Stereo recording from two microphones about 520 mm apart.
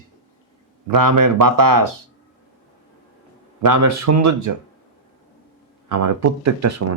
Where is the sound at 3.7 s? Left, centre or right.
Right.